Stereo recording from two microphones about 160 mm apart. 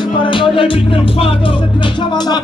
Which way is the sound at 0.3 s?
30° left (ahead or behind).